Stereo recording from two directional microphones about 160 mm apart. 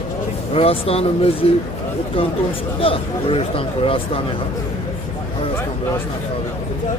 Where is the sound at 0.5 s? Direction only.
35° left (ahead or behind).